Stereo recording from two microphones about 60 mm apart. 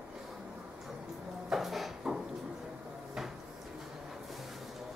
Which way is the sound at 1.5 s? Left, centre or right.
Centre.